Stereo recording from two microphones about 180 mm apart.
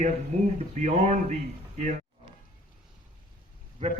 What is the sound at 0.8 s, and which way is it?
A man's voice, 40° right (ahead or behind).